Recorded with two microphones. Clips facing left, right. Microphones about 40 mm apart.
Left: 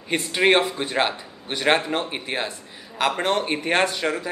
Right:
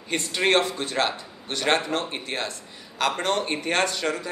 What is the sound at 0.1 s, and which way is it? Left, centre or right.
Speech, centre.